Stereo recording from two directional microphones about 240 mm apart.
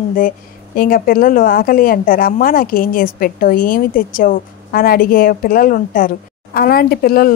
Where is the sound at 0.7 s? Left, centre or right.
Left.